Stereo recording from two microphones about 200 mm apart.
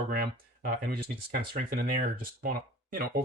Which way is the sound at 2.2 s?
45° right (ahead or behind).